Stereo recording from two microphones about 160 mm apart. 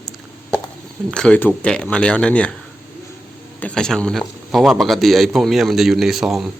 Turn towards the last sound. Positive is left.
turn(degrees=0)  # may be behind; listen again after turning